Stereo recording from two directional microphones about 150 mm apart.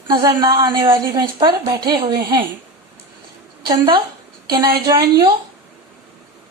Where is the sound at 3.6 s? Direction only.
30° right (ahead or behind).